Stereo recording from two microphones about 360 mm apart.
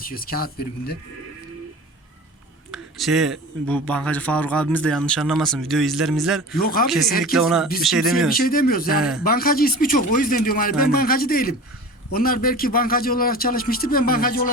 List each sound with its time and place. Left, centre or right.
0.0 s a man's voice: left
2.7 s a man's voice: centre
6.6 s a man's voice: left
6.8 s a man's voice: centre
7.1 s a man's voice: left
7.3 s a man's voice: centre
8.3 s a man's voice: left
9.0 s a man's voice: centre
9.2 s a man's voice: left